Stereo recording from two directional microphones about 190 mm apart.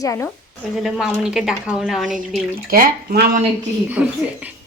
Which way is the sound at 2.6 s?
50° right (ahead or behind).